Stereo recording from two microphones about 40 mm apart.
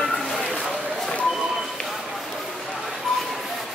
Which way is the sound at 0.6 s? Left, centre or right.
Centre.